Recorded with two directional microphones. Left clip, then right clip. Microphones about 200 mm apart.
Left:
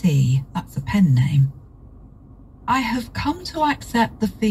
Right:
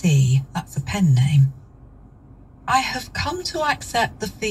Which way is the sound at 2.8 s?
50° right (ahead or behind).